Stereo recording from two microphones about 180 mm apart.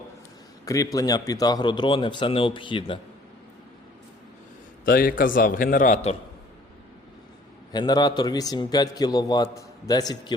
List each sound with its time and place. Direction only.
0.6 s a man's voice: 20° left (ahead or behind)
4.9 s a man's voice: 55° left (ahead or behind); by 6.1 s 40° left (ahead or behind)
7.7 s a man's voice: 25° left (ahead or behind)